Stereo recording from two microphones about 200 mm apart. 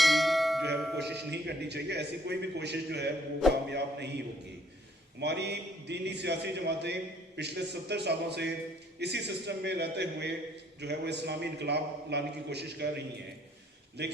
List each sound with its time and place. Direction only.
0.0 s bell: centre (ahead or behind)
0.8 s music: centre (ahead or behind)
1.3 s a man's voice: 55° right (ahead or behind)
5.2 s a man's voice: 55° right (ahead or behind)